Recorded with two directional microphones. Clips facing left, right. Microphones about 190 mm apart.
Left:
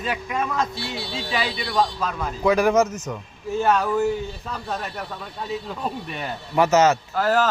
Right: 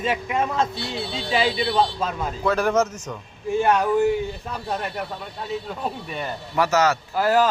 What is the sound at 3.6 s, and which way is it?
Speech, 15° right (ahead or behind).